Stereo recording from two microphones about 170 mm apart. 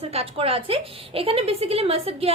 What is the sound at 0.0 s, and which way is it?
A woman's voice, 35° right (ahead or behind).